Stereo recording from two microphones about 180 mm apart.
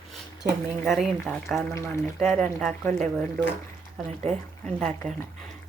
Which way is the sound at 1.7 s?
15° left (ahead or behind).